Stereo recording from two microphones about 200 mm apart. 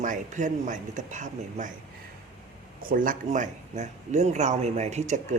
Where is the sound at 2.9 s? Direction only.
40° right (ahead or behind).